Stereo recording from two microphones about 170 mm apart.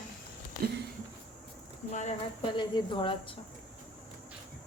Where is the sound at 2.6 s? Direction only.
25° left (ahead or behind).